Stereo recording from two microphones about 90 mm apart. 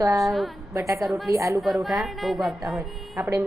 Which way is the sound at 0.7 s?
35° right (ahead or behind).